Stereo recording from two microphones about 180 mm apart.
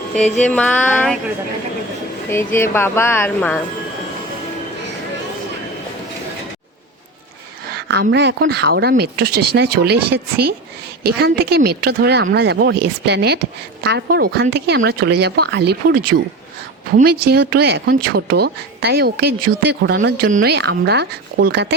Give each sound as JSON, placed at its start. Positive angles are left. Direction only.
{"t": 0.4, "sound": "speech", "side_deg": 5}
{"t": 2.3, "sound": "speech", "side_deg": 15}
{"t": 7.7, "sound": "speech", "side_deg": -65}